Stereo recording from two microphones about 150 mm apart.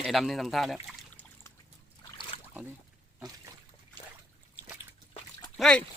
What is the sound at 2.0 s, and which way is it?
Boat, 30° left (ahead or behind).